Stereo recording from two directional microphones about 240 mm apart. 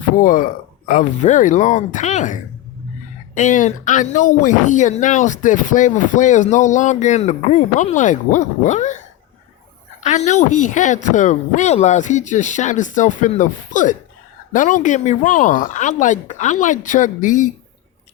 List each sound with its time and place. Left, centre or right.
0.2 s speech: left
10.0 s speech: left